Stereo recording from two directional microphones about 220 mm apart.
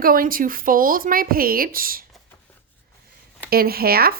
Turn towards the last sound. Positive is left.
turn(degrees=-45)  # may be behind; listen again after turning